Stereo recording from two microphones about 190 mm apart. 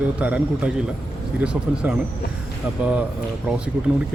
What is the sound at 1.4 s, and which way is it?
Speech, 5° right (ahead or behind).